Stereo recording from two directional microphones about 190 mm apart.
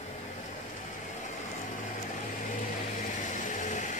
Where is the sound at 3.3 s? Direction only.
40° left (ahead or behind).